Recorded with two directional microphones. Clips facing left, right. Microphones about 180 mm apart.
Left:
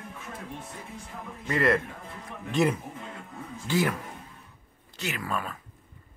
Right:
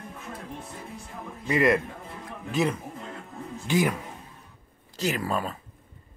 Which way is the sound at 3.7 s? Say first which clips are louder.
Right 2 dB; 15° right (ahead or behind).